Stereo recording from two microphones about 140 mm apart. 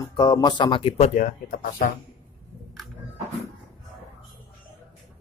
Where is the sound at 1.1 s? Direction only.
70° left (ahead or behind).